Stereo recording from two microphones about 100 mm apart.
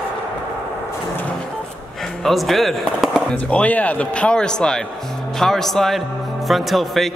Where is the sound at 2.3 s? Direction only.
Centre (ahead or behind).